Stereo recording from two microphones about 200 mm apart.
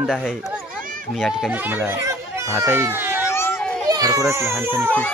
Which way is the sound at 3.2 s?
15° left (ahead or behind).